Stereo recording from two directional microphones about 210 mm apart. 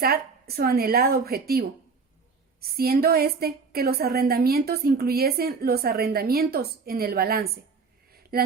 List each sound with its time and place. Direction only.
0.0 s a woman's voice: 45° right (ahead or behind)